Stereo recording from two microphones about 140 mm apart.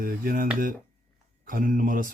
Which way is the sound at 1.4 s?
75° right (ahead or behind).